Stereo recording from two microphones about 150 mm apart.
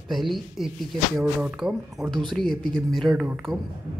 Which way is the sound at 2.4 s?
30° right (ahead or behind).